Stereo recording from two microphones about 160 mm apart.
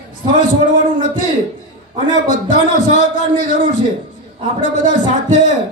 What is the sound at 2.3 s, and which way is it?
Speech, 50° left (ahead or behind).